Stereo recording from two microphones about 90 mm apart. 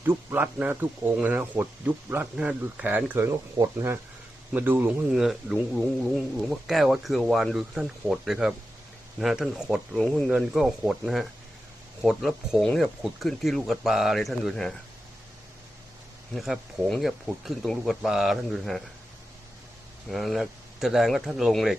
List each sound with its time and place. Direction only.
0.0 s a man's voice: 25° right (ahead or behind)
3.2 s a man's voice: 30° right (ahead or behind)
5.1 s speech: 5° right (ahead or behind)
10.0 s speech: 10° left (ahead or behind)
10.2 s speech: 5° right (ahead or behind)
16.3 s speech: centre (ahead or behind)
20.1 s speech: centre (ahead or behind)